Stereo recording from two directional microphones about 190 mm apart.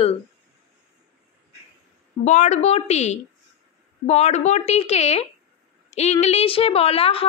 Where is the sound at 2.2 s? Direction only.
40° left (ahead or behind).